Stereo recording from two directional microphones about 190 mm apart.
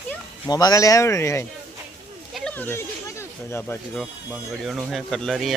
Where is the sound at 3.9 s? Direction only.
Centre (ahead or behind).